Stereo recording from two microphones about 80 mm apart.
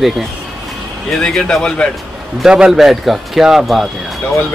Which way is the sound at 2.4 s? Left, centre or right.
Centre.